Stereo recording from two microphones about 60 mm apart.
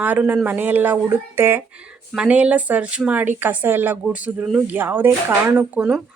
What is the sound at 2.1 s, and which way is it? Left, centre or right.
A woman's voice, centre.